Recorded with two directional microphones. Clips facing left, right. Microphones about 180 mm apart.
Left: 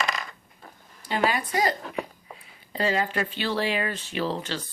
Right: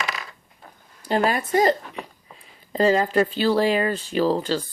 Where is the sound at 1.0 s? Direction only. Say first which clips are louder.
Right 4 dB; 45° right (ahead or behind).